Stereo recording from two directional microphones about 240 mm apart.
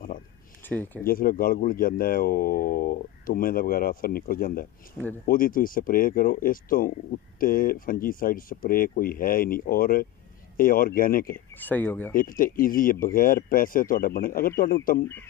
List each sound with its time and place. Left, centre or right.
0.7 s speech: centre
1.0 s speech: left
11.3 s speech: centre
12.1 s speech: left